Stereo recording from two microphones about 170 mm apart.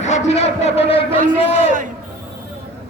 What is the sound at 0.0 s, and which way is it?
A man's voice, 45° left (ahead or behind).